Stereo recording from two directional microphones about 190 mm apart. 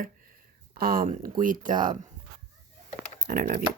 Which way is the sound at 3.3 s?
45° right (ahead or behind).